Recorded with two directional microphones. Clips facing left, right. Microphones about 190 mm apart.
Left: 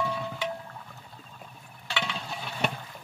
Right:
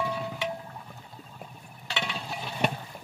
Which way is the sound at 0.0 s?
15° right (ahead or behind).